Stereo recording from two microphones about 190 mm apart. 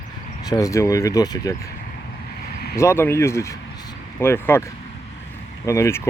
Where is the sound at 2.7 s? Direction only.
15° left (ahead or behind).